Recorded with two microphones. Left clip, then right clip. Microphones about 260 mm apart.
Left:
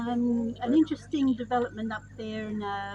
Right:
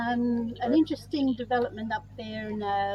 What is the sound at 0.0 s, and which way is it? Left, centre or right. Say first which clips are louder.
Speech: right 1 dB; right.